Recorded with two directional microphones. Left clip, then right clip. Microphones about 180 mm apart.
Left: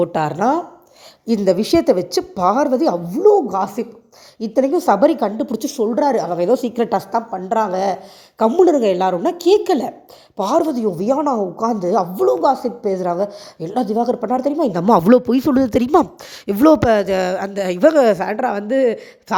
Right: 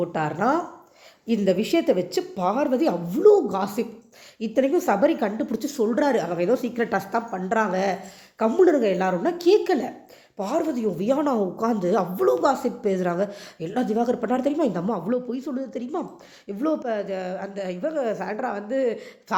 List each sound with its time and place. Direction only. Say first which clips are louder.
0.0 s a woman's voice: left 7 dB; 45° left (ahead or behind)
2.7 s a woman's voice: left 6 dB; 20° left (ahead or behind)
3.2 s a woman's voice: left 3 dB; 10° right (ahead or behind)
4.4 s a woman's voice: left 5 dB; 25° left (ahead or behind)
11.6 s a woman's voice: left 7 dB; 15° left (ahead or behind)
14.7 s a woman's voice: left 14 dB; 55° left (ahead or behind); by 19.4 s 40° left (ahead or behind)